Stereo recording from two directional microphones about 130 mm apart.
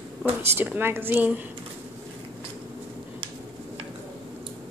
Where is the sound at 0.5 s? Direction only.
15° right (ahead or behind).